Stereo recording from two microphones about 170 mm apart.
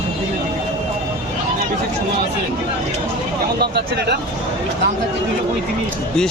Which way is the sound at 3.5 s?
75° right (ahead or behind).